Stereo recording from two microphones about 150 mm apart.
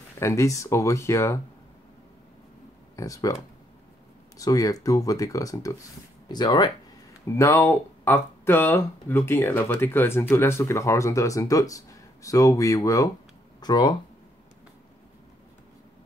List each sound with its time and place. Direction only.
0.2 s speech: 20° left (ahead or behind)
3.0 s speech: 20° left (ahead or behind)
4.4 s speech: 20° left (ahead or behind)